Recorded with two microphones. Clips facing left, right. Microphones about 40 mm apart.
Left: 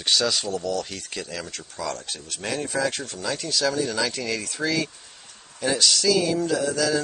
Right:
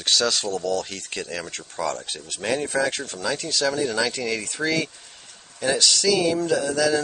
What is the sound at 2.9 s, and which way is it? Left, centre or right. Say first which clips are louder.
Speech: right 2 dB; centre.